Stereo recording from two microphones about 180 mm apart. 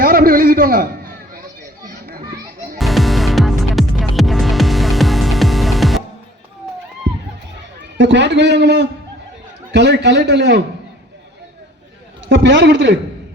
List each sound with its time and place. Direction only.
0.0 s a sound: 55° right (ahead or behind)
2.7 s music: centre (ahead or behind)
7.8 s a man's voice: 80° right
12.3 s a man's voice: 80° right